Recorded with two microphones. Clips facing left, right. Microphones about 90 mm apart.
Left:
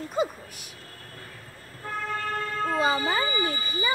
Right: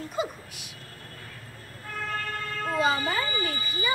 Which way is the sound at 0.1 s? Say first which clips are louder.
Left 5 dB; 40° left (ahead or behind).